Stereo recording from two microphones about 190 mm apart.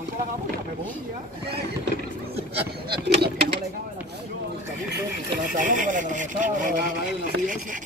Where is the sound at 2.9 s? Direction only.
55° right (ahead or behind).